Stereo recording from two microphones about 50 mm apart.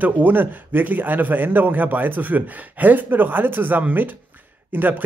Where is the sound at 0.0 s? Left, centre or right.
Right.